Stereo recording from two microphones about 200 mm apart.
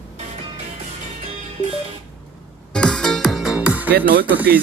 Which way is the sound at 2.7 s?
5° left (ahead or behind).